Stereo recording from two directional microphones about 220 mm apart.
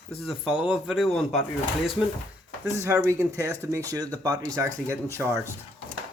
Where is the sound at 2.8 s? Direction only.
10° right (ahead or behind).